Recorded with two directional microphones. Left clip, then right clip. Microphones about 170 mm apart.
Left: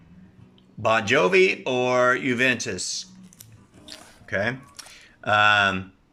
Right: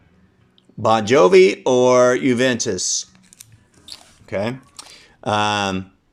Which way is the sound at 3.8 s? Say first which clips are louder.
Right 3 dB; 25° right (ahead or behind).